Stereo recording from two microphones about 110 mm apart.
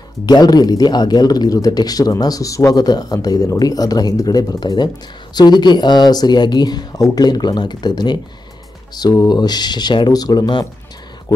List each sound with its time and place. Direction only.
0.3 s speech: 40° left (ahead or behind)